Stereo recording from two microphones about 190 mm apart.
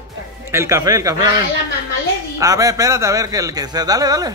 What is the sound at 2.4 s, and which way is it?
A man's voice, 20° right (ahead or behind).